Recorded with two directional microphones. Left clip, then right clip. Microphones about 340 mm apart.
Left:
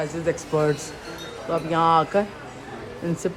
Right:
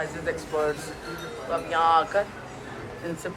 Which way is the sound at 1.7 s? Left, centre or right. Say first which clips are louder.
Left 2 dB; centre.